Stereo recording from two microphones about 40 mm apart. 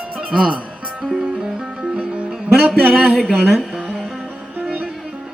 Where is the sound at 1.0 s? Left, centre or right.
Centre.